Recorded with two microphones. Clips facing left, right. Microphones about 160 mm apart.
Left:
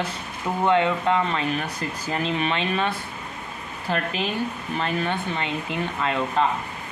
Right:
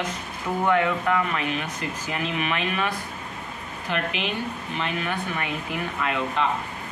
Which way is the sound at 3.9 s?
40° left (ahead or behind).